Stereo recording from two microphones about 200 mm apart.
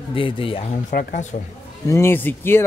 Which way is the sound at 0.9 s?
35° left (ahead or behind).